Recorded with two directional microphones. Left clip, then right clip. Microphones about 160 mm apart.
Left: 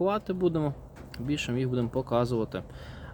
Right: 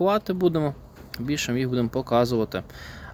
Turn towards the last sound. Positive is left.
turn(degrees=-25)  # may be behind; listen again after turning